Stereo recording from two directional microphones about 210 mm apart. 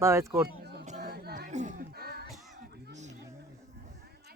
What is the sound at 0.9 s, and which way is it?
Chatter, 40° right (ahead or behind).